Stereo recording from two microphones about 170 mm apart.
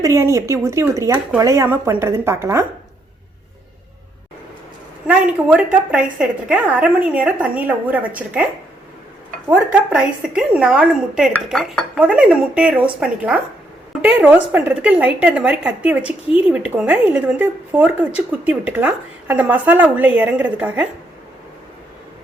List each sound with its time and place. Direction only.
0.0 s speech: 15° right (ahead or behind)
5.0 s speech: 5° right (ahead or behind)
9.5 s speech: 5° right (ahead or behind)